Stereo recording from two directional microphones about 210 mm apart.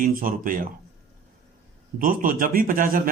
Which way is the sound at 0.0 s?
40° right (ahead or behind).